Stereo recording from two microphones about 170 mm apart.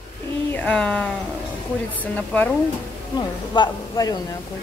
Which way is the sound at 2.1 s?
10° left (ahead or behind).